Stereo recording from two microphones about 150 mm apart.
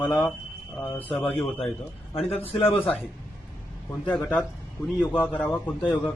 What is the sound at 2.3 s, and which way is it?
Speech, 40° left (ahead or behind).